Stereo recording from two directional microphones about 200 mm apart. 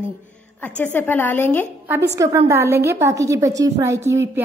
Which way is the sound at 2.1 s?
15° right (ahead or behind).